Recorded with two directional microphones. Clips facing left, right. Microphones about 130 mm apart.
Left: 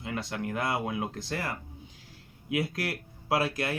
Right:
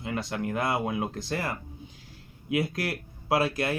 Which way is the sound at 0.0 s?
30° right (ahead or behind).